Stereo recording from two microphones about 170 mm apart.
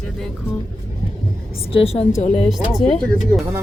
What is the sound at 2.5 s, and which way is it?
Speech, 5° right (ahead or behind).